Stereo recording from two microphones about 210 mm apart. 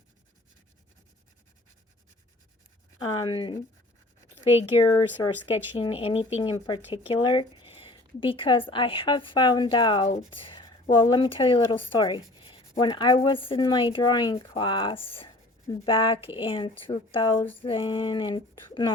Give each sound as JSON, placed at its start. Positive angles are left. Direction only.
{"t": 3.2, "sound": "a woman's voice", "side_deg": 25}